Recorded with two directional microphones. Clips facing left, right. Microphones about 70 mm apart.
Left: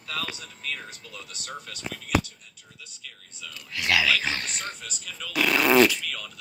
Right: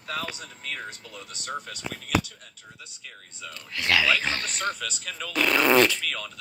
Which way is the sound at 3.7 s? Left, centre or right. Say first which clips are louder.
Even; centre.